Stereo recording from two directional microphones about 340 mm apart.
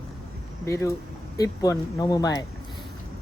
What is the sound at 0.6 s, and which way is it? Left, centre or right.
Speech, centre.